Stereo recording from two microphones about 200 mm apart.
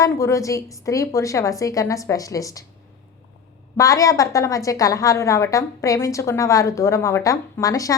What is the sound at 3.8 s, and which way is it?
A woman's voice, 15° left (ahead or behind).